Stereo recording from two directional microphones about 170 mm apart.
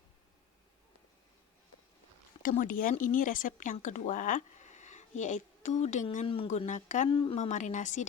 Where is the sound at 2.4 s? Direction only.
50° left (ahead or behind).